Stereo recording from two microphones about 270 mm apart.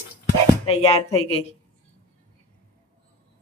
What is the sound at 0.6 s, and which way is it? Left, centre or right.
Speech, left.